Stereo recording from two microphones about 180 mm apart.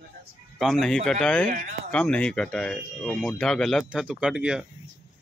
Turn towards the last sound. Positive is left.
turn(degrees=-5)  # may be behind; listen again after turning